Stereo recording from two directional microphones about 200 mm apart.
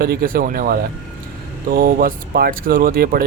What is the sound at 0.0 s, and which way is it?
Speech, 45° right (ahead or behind).